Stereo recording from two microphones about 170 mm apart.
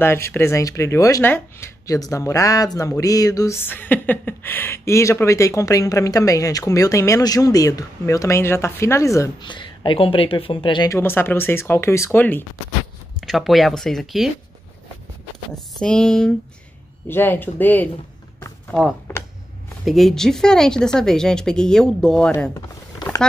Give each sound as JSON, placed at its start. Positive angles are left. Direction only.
{"t": 0.0, "sound": "speech", "side_deg": 15}
{"t": 10.9, "sound": "speech", "side_deg": 15}
{"t": 13.2, "sound": "speech", "side_deg": 0}
{"t": 15.8, "sound": "speech", "side_deg": 5}
{"t": 22.3, "sound": "speech", "side_deg": 15}